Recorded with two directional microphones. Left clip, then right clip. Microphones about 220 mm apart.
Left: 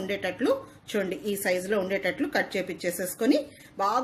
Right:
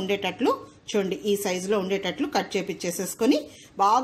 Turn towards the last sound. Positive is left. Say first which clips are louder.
# right 5 dB
turn(degrees=-30)  # may be behind; listen again after turning